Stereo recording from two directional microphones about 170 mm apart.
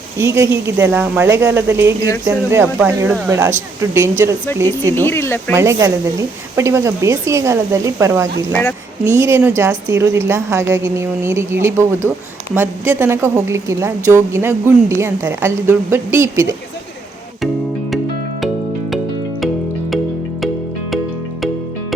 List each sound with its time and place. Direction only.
0.2 s a woman's voice: 15° right (ahead or behind)
4.9 s speech: 15° left (ahead or behind)
5.5 s a woman's voice: 15° right (ahead or behind)